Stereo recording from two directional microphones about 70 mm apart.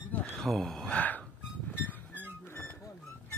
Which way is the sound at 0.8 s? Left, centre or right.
Left.